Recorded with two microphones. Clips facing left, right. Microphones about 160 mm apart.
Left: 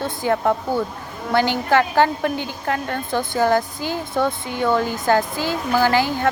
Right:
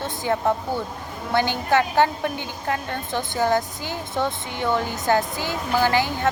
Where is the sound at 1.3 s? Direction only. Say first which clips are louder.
Left 3 dB; 20° right (ahead or behind).